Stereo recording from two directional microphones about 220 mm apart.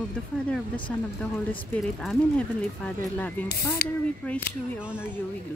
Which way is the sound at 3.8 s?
45° left (ahead or behind).